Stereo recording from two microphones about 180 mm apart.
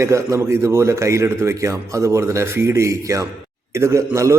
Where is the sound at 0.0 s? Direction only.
15° right (ahead or behind).